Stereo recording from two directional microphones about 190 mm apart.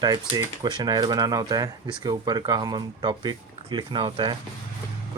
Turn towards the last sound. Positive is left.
turn(degrees=-25)  # may be behind; listen again after turning